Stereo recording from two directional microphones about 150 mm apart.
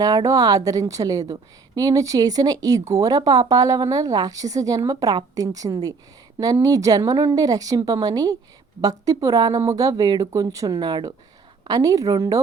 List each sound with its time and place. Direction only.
0.0 s a woman's voice: 25° right (ahead or behind)